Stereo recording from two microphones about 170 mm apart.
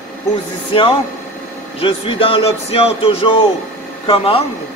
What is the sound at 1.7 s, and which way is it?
Speech, 35° left (ahead or behind).